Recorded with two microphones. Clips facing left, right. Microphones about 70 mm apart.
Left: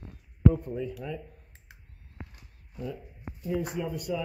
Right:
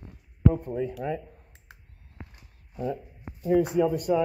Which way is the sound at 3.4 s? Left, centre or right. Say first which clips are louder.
Right 9 dB; right.